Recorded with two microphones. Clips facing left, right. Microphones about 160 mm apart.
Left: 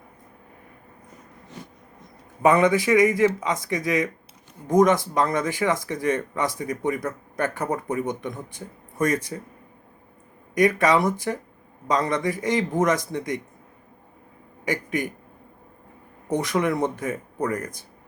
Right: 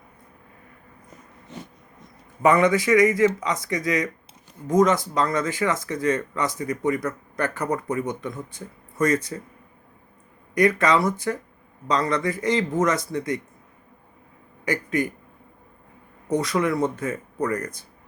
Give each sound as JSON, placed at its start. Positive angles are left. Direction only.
{"t": 2.4, "sound": "speech", "side_deg": 20}
{"t": 10.5, "sound": "speech", "side_deg": 20}
{"t": 14.7, "sound": "speech", "side_deg": 20}
{"t": 16.5, "sound": "speech", "side_deg": 15}